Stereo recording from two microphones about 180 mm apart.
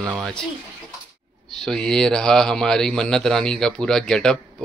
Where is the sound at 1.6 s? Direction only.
5° left (ahead or behind).